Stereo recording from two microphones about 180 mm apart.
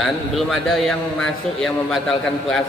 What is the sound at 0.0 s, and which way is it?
A man's voice, centre (ahead or behind).